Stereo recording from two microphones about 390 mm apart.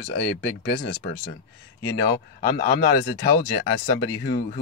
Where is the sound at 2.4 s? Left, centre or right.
Left.